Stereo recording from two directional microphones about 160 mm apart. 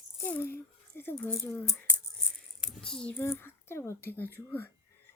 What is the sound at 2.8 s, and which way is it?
A child's voice, 5° left (ahead or behind).